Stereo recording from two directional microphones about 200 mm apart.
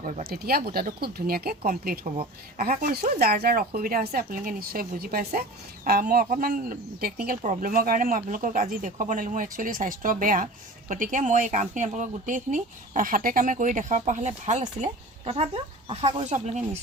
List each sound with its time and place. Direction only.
0.0 s speech: 40° right (ahead or behind)